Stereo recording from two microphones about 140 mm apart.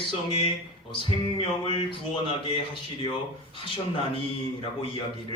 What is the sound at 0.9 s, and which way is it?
Music, 40° left (ahead or behind).